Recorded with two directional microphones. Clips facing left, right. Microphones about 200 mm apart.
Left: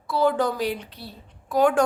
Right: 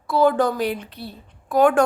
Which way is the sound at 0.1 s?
50° right (ahead or behind).